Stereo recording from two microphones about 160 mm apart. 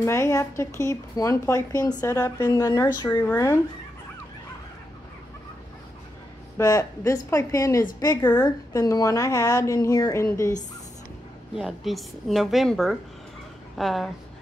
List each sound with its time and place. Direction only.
0.0 s speech: 15° left (ahead or behind)
6.6 s speech: 20° left (ahead or behind)
11.5 s a woman's voice: centre (ahead or behind)